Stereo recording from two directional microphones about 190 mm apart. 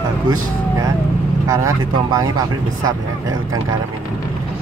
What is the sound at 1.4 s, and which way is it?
Speech, 15° right (ahead or behind).